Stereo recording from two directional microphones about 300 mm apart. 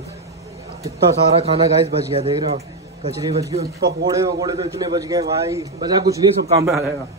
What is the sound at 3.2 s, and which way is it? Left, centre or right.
A man's voice, centre.